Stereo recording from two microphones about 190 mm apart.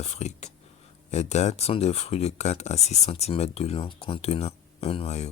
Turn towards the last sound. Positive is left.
turn(degrees=35)  # may be behind; listen again after turning